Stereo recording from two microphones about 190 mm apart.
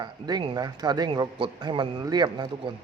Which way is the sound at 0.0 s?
20° right (ahead or behind).